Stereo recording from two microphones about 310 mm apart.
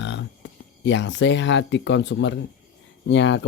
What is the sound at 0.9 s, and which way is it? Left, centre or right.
Speech, left.